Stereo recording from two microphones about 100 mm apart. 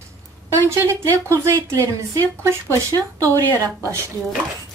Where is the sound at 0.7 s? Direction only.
25° right (ahead or behind).